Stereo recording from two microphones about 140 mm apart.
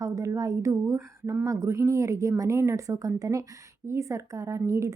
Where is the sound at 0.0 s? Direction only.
25° right (ahead or behind).